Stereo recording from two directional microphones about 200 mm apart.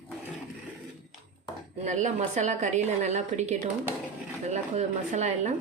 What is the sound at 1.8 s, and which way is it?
A woman's voice, 35° right (ahead or behind).